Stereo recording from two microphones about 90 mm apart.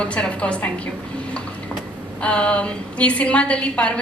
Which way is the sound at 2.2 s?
15° left (ahead or behind).